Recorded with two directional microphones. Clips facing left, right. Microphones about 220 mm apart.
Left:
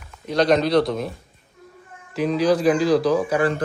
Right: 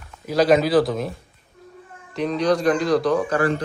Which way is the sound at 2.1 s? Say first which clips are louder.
Left 1 dB; 5° left (ahead or behind).